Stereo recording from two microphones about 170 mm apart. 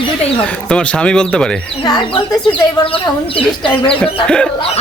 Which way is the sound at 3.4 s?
30° left (ahead or behind).